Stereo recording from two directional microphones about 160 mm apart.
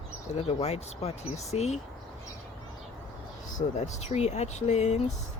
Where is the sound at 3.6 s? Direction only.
45° left (ahead or behind).